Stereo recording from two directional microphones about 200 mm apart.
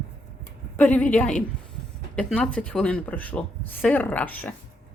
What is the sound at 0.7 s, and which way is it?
Speech, 5° left (ahead or behind).